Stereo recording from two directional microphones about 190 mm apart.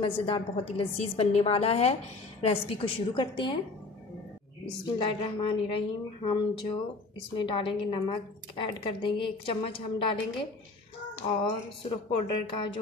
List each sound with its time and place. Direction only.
0.0 s a woman's voice: 30° left (ahead or behind)
4.9 s a woman's voice: 25° left (ahead or behind)
11.8 s a woman's voice: 30° left (ahead or behind)